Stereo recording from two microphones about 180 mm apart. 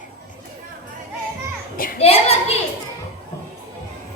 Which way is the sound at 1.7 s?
50° left (ahead or behind).